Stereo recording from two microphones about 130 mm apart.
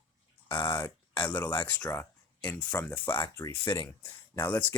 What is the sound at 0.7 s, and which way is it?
Speech, 15° left (ahead or behind).